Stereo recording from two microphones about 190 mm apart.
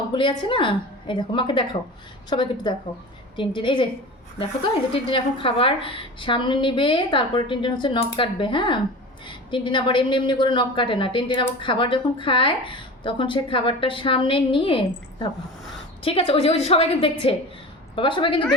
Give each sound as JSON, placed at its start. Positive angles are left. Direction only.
{"t": 0.1, "sound": "a woman's voice", "side_deg": 25}
{"t": 5.0, "sound": "a woman's voice", "side_deg": 30}